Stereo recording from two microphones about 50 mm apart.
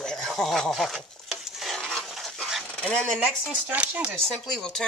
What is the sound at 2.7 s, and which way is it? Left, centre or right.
Speech, centre.